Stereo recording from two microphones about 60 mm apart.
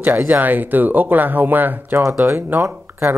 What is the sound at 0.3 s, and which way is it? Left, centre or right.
A man's voice, right.